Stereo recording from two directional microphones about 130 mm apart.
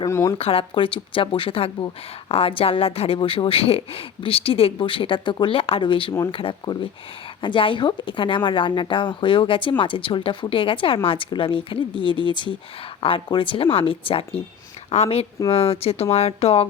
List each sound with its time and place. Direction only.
0.1 s speech: 25° left (ahead or behind)
0.3 s speech: 50° left (ahead or behind)